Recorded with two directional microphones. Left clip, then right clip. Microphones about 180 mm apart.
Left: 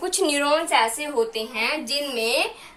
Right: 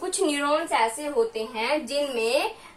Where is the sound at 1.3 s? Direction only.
20° right (ahead or behind).